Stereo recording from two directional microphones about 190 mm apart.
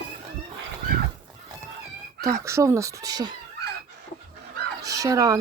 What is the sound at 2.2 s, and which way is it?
Speech, 15° right (ahead or behind).